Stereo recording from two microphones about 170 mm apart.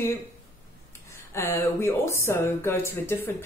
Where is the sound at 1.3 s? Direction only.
15° left (ahead or behind).